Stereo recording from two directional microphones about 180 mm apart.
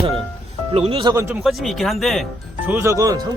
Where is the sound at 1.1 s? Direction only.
15° right (ahead or behind).